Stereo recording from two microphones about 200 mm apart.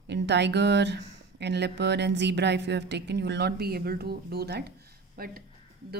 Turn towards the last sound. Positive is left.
turn(degrees=-45)  # may be behind; listen again after turning